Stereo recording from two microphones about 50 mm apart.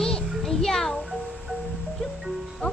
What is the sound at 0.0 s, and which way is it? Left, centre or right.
Music, centre.